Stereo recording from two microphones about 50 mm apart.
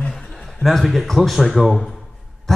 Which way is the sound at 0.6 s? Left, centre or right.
Centre.